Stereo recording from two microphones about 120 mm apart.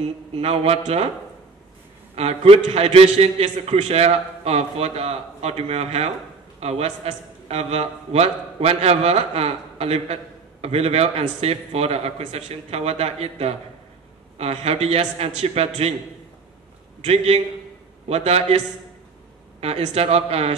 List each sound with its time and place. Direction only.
0.4 s a man's voice: 60° right (ahead or behind)
2.1 s a man's voice: 60° right (ahead or behind)
17.0 s a man's voice: 60° right (ahead or behind)
19.6 s a man's voice: 65° right (ahead or behind)